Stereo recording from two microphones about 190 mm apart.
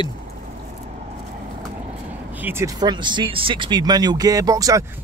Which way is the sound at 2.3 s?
10° right (ahead or behind).